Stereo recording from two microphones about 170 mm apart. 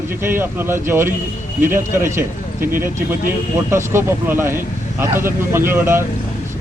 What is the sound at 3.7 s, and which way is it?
Speech, 15° right (ahead or behind).